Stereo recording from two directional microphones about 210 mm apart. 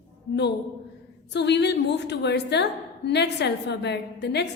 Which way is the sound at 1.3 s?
55° left (ahead or behind).